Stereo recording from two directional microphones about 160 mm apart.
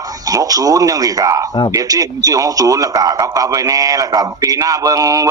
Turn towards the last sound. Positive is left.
turn(degrees=-20)  # may be behind; listen again after turning